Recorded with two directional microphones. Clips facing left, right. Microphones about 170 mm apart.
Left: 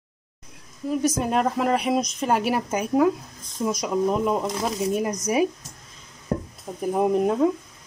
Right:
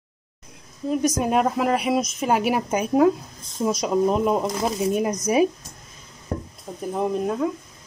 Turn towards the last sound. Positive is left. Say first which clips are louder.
# left 3 dB
turn(degrees=20)  # may be behind; listen again after turning